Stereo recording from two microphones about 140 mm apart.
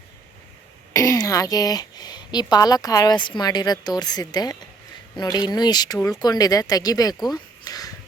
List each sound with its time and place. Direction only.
0.9 s a woman's voice: 25° left (ahead or behind)